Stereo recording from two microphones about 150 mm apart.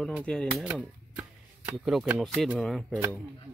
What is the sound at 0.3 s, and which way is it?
Speech, 5° left (ahead or behind).